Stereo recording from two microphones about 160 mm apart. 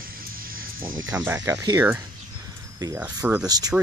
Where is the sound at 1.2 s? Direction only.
15° right (ahead or behind).